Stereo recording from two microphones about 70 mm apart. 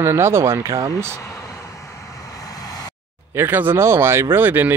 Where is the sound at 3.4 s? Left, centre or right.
Right.